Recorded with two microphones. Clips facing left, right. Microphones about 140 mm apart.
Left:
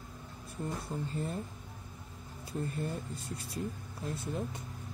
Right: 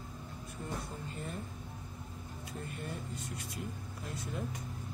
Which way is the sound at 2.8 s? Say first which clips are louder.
Left 4 dB; 35° left (ahead or behind).